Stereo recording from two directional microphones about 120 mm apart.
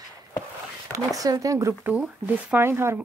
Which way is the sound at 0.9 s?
30° right (ahead or behind).